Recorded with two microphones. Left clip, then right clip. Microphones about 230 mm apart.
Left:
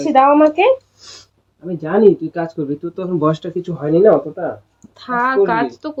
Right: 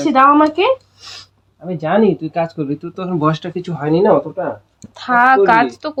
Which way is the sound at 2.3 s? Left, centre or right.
Right.